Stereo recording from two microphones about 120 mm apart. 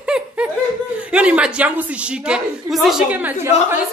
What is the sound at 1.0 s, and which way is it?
Speech, 10° right (ahead or behind).